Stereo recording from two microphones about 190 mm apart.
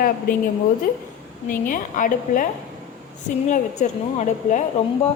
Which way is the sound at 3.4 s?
40° left (ahead or behind).